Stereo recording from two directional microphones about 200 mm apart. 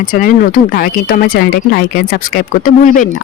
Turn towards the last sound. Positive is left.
turn(degrees=45)  # may be behind; listen again after turning